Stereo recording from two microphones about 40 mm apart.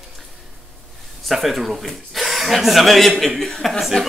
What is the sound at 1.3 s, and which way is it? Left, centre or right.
Speech, centre.